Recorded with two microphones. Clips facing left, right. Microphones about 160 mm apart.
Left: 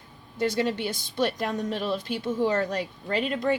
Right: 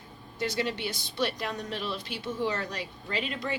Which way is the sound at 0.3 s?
50° left (ahead or behind).